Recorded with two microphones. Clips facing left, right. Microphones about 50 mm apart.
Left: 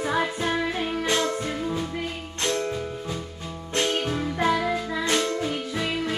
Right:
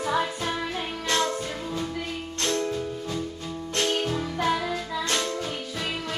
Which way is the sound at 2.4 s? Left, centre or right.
Centre.